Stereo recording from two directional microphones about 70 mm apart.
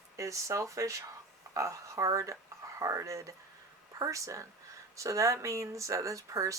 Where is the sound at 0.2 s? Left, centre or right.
Right.